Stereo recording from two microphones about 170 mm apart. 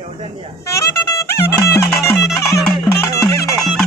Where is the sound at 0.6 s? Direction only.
15° left (ahead or behind).